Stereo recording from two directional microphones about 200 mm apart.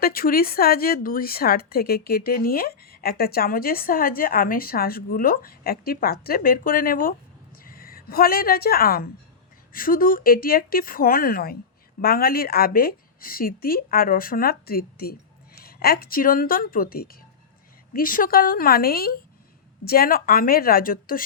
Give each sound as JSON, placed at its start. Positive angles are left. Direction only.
{"t": 0.0, "sound": "a woman's voice", "side_deg": 50}